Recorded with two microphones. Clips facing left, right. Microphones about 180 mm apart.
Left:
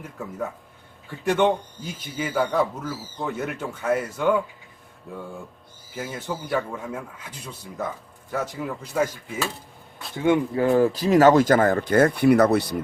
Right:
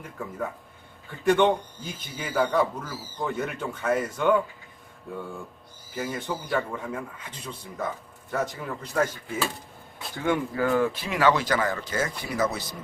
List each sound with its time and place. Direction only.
0.2 s speech: 5° left (ahead or behind)
5.9 s speech: 5° left (ahead or behind)
10.2 s speech: 20° left (ahead or behind); by 12.7 s 60° left (ahead or behind)